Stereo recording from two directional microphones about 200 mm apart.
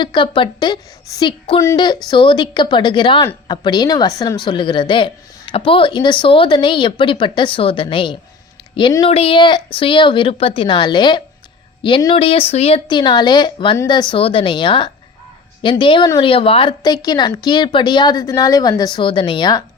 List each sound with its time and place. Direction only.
0.0 s a woman's voice: 25° left (ahead or behind)